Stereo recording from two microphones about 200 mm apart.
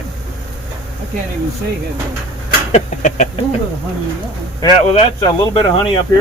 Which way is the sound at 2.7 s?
35° left (ahead or behind).